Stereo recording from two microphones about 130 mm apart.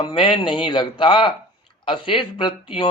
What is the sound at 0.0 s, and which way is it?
A man's voice, 40° left (ahead or behind).